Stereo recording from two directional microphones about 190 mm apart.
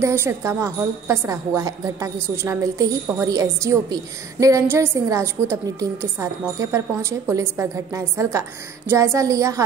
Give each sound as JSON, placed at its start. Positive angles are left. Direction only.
{"t": 0.0, "sound": "a woman's voice", "side_deg": -15}